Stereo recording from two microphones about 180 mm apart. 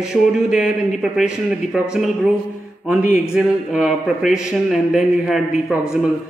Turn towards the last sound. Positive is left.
turn(degrees=-5)  # may be behind; listen again after turning